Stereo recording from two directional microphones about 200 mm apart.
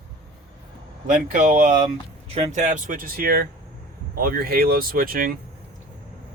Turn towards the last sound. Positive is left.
turn(degrees=-45)  # may be behind; listen again after turning